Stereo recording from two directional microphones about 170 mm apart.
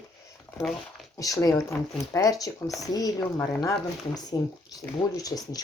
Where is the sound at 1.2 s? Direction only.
20° left (ahead or behind).